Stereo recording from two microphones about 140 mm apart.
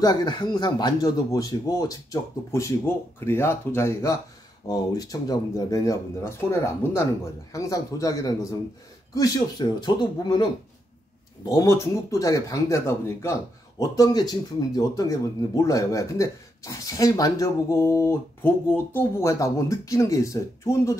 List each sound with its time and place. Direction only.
0.0 s speech: 30° left (ahead or behind)